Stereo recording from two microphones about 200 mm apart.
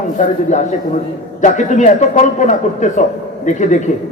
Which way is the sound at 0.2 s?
40° left (ahead or behind).